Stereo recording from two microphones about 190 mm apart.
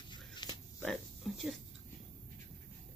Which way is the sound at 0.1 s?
25° left (ahead or behind).